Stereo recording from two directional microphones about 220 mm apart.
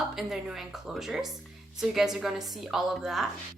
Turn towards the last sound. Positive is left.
turn(degrees=0)  # may be behind; listen again after turning